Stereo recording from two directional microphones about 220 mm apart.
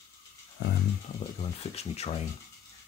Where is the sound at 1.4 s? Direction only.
30° left (ahead or behind).